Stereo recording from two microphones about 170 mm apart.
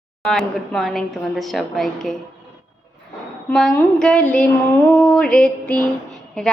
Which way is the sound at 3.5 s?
5° left (ahead or behind).